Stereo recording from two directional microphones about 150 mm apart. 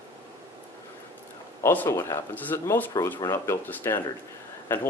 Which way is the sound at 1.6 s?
15° left (ahead or behind).